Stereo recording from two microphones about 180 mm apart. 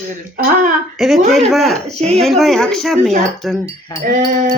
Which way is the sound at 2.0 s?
35° right (ahead or behind).